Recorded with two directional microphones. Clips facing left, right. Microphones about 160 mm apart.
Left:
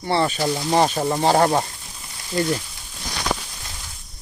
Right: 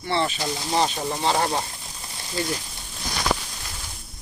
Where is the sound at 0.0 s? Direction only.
40° left (ahead or behind).